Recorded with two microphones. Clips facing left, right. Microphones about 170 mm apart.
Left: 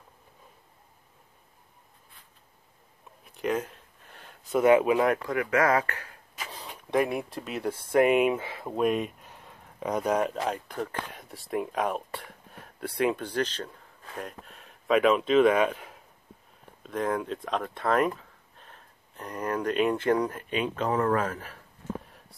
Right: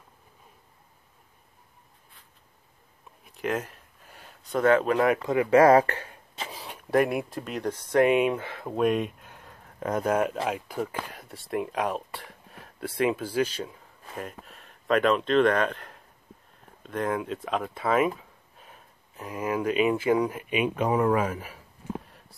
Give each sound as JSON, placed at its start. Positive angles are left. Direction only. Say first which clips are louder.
{"t": 3.3, "sound": "a sound", "louder": "left 1 dB", "side_deg": 0}
{"t": 4.6, "sound": "speech", "louder": "left 1 dB", "side_deg": 10}
{"t": 5.2, "sound": "speech", "louder": "right 7 dB", "side_deg": -25}
{"t": 6.5, "sound": "speech", "louder": "right 3 dB", "side_deg": -5}